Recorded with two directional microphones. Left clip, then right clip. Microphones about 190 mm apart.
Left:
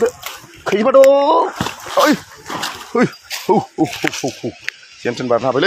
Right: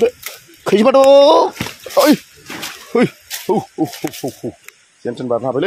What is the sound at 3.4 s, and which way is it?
Speech, 15° left (ahead or behind).